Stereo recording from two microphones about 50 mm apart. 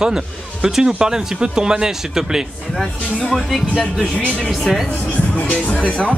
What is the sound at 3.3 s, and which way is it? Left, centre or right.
Speech, centre.